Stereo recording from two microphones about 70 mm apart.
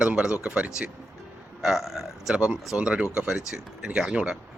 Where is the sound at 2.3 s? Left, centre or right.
Centre.